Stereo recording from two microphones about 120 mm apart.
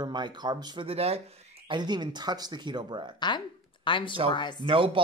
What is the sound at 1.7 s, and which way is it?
Speech, 40° right (ahead or behind).